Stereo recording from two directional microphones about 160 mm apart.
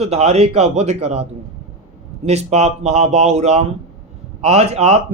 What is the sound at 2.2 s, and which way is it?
Speech, 45° right (ahead or behind).